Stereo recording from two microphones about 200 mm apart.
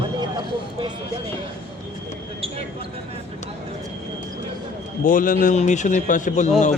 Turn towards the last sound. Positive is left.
turn(degrees=40)  # may be behind; listen again after turning